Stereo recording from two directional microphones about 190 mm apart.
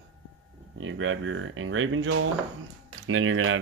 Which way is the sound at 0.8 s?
90° right.